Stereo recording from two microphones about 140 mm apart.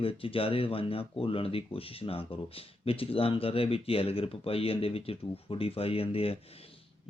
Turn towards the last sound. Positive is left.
turn(degrees=45)  # may be behind; listen again after turning